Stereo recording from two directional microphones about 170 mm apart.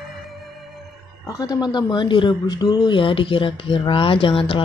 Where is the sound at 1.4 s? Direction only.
25° left (ahead or behind).